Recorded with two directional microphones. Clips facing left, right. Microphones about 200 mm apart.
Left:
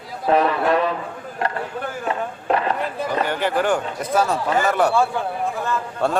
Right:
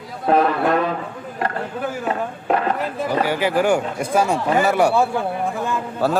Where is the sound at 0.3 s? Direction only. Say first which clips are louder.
Right 1 dB; 50° right (ahead or behind).